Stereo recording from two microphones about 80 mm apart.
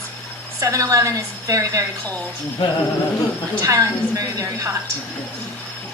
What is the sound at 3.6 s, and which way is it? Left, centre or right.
A woman's voice, right.